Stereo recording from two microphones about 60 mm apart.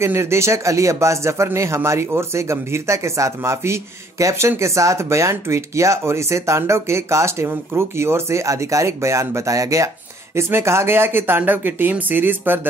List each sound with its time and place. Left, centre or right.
0.0 s speech: right
10.3 s speech: right